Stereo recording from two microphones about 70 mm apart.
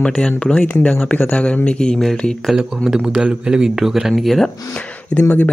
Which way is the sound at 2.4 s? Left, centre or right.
Centre.